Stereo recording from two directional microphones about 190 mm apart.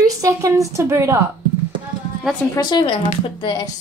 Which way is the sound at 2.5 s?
20° left (ahead or behind).